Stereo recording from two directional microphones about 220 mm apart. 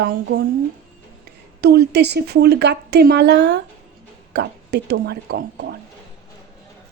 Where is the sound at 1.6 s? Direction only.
45° right (ahead or behind).